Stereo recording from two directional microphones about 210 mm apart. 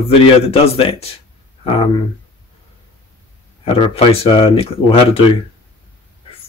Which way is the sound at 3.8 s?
25° left (ahead or behind).